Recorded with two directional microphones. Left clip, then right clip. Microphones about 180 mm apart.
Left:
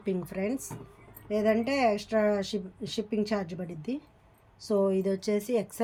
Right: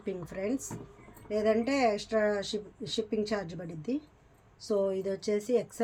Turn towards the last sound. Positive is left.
turn(degrees=45)  # may be behind; listen again after turning